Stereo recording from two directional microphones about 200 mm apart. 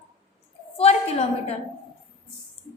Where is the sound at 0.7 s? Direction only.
30° left (ahead or behind).